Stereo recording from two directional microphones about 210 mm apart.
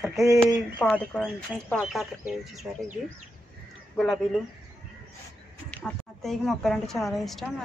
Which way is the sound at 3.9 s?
Centre (ahead or behind).